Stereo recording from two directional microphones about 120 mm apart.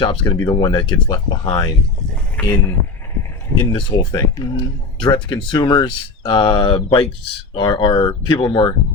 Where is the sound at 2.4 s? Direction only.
10° left (ahead or behind).